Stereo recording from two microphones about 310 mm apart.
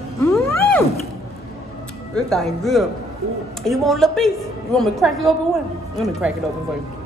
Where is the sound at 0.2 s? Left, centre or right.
Centre.